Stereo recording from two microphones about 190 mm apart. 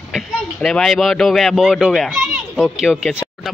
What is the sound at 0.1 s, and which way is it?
A man's voice, centre (ahead or behind).